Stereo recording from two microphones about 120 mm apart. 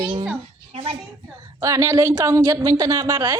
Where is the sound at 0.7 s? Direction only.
55° right (ahead or behind).